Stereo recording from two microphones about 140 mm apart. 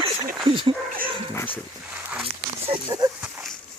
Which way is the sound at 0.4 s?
35° right (ahead or behind).